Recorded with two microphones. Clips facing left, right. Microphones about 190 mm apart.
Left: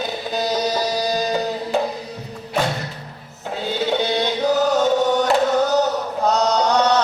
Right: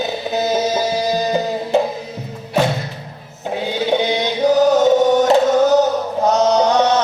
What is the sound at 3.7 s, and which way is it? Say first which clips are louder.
Music: right 2 dB; 15° right (ahead or behind).